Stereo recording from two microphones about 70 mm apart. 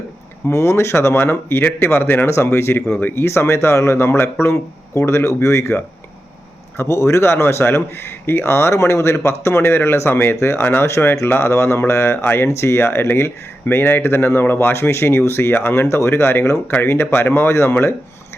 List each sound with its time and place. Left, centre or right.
0.4 s speech: left
3.2 s speech: left
6.7 s speech: left